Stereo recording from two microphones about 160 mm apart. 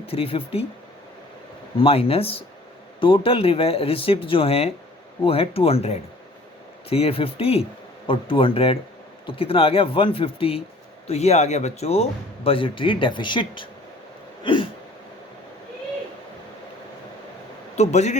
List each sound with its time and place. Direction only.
0.0 s a man's voice: 35° left (ahead or behind)
1.8 s a man's voice: 35° left (ahead or behind)
14.4 s a sound: 30° left (ahead or behind)
17.7 s speech: 45° left (ahead or behind)